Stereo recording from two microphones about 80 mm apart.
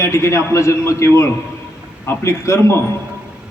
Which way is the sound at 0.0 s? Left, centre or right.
Left.